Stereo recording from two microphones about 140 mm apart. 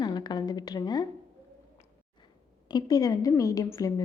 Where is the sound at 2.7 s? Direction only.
25° left (ahead or behind).